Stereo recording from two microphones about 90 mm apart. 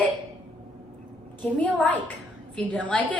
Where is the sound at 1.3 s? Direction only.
15° left (ahead or behind).